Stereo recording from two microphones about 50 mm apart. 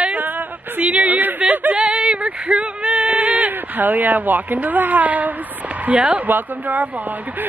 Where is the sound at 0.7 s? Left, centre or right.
Right.